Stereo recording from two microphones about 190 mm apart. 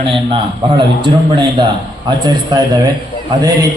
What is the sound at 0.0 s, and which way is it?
A man's voice, 25° right (ahead or behind).